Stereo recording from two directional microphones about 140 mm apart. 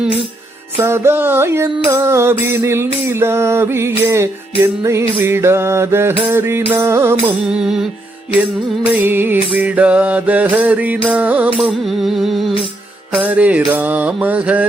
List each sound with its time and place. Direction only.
0.8 s music: 20° right (ahead or behind)
7.4 s music: 5° right (ahead or behind)
8.9 s music: 15° right (ahead or behind)
11.5 s music: centre (ahead or behind)